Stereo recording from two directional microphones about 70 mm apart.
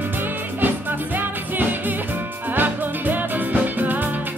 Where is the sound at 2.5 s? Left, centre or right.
Right.